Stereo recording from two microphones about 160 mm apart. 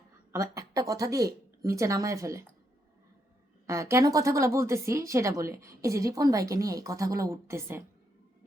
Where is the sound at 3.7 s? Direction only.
20° right (ahead or behind).